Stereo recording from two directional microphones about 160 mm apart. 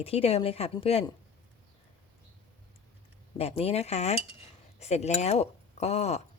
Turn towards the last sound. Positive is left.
turn(degrees=40)  # may be behind; listen again after turning